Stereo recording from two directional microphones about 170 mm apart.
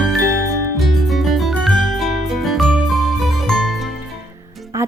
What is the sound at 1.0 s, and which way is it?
Music, centre (ahead or behind).